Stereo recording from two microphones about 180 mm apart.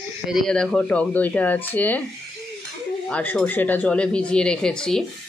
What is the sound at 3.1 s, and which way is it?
Speech, 10° left (ahead or behind).